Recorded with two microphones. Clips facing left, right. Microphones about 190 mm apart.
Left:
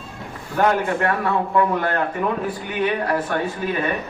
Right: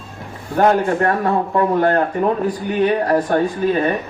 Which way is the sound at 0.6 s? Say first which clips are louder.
Right 4 dB; 35° right (ahead or behind).